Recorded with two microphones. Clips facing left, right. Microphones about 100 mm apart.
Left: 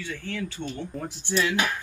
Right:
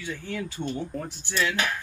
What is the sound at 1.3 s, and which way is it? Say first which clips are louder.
Speech: left 2 dB; 20° left (ahead or behind).